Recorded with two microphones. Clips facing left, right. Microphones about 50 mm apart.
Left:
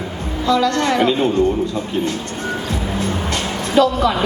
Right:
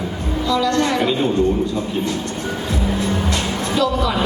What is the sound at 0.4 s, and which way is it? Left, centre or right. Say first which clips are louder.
Speech: left 2 dB; left.